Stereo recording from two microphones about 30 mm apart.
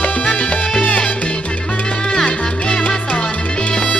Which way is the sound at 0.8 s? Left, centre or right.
Left.